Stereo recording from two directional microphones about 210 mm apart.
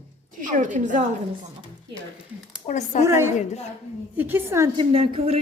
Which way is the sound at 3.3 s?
30° left (ahead or behind).